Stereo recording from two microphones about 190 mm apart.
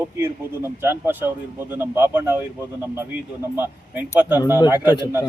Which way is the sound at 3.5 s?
10° right (ahead or behind).